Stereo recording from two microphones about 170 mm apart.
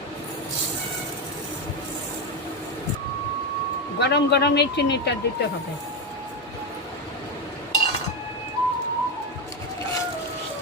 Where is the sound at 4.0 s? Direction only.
80° left.